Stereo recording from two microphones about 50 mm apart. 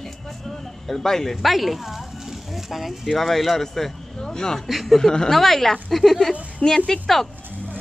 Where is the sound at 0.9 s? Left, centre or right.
Centre.